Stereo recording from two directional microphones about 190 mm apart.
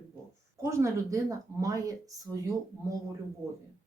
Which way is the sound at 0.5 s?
15° right (ahead or behind).